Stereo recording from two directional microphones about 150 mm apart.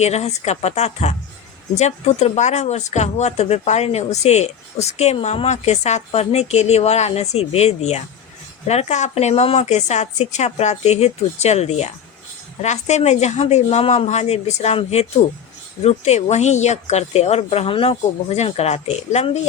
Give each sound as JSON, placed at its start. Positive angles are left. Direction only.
{"t": 0.0, "sound": "speech", "side_deg": 45}